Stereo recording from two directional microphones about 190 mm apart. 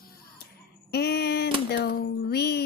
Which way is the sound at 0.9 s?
60° left (ahead or behind).